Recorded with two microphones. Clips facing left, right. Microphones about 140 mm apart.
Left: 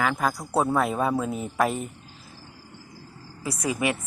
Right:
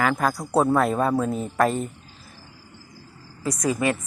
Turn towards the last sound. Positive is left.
turn(degrees=15)  # may be behind; listen again after turning